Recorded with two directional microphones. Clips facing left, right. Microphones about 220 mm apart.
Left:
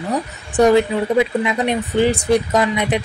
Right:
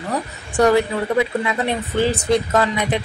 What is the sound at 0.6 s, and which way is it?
Speech, 20° left (ahead or behind).